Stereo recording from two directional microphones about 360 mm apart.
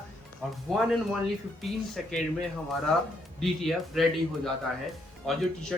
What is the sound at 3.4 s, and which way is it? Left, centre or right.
Speech, centre.